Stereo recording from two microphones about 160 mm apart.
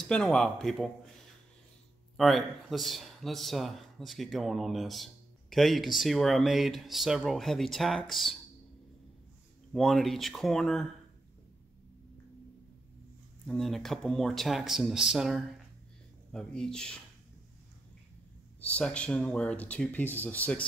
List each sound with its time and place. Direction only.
0.0 s speech: 5° left (ahead or behind)
2.1 s speech: centre (ahead or behind)
9.7 s speech: centre (ahead or behind)
13.5 s speech: centre (ahead or behind)
18.7 s speech: 5° left (ahead or behind)